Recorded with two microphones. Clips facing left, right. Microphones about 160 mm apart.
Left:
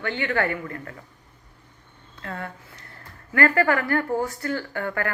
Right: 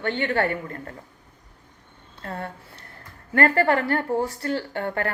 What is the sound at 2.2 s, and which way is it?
Speech, 30° right (ahead or behind).